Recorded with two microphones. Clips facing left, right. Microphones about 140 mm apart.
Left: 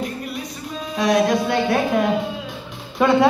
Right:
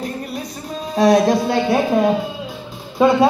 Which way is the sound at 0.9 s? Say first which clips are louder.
Right 4 dB; 35° right (ahead or behind).